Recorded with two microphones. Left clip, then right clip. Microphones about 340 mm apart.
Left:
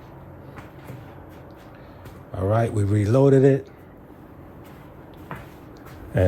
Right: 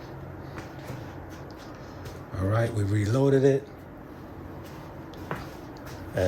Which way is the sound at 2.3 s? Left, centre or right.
Centre.